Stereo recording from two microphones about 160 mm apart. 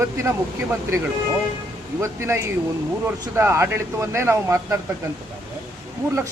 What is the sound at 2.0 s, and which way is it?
Speech, 15° right (ahead or behind).